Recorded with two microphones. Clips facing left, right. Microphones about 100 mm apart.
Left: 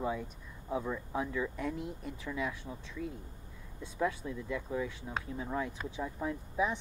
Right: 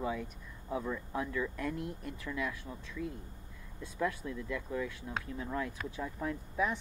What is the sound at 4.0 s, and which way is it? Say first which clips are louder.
Speech: left 1 dB; 15° left (ahead or behind).